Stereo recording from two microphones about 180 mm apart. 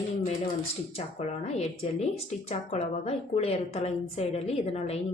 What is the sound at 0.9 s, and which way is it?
Speech, 35° left (ahead or behind).